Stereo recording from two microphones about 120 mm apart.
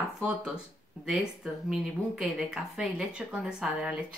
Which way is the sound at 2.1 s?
5° right (ahead or behind).